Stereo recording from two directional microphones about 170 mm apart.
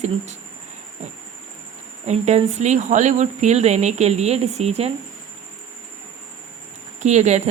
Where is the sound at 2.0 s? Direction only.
40° right (ahead or behind).